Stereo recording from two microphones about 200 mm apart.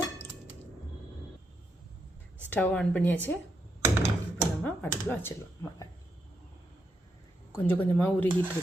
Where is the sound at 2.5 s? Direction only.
5° left (ahead or behind).